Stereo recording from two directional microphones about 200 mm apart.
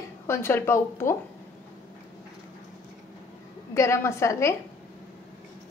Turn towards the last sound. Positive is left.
turn(degrees=15)  # may be behind; listen again after turning